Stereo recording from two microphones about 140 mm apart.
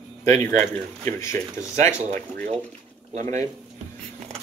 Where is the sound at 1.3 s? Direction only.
60° right (ahead or behind).